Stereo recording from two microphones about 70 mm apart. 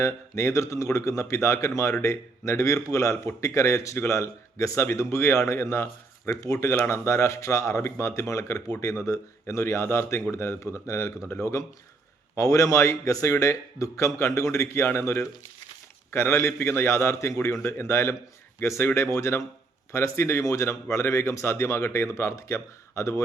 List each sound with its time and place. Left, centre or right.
0.0 s a man's voice: left
12.4 s a man's voice: left